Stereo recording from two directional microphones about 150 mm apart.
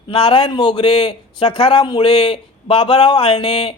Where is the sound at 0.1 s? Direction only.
35° left (ahead or behind).